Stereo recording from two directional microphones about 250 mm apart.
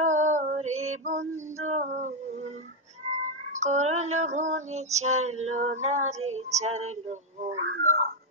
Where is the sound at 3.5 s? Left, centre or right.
Right.